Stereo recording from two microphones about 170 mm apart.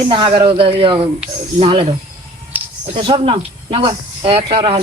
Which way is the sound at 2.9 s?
30° right (ahead or behind).